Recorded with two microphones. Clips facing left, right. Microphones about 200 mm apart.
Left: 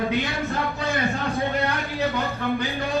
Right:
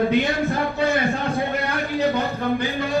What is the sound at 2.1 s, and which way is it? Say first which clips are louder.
Speech: right 3 dB; 15° right (ahead or behind).